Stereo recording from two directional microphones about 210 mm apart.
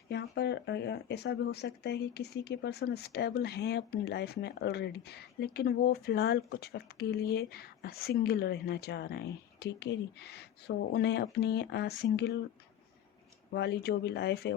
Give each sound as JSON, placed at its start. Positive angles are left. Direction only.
{"t": 0.1, "sound": "speech", "side_deg": 55}
{"t": 13.5, "sound": "speech", "side_deg": 55}